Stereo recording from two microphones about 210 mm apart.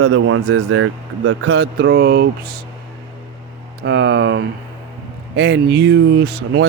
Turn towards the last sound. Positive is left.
turn(degrees=-50)  # may be behind; listen again after turning